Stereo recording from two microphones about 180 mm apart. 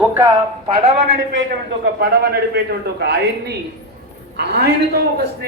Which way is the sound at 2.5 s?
65° right (ahead or behind).